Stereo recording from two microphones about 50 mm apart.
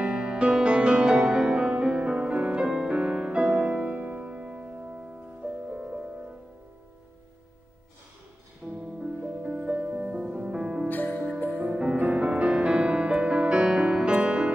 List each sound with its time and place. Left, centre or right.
0.0 s music: centre
8.6 s music: centre
9.1 s music: right; by 10.9 s centre
10.9 s music: left
11.5 s music: right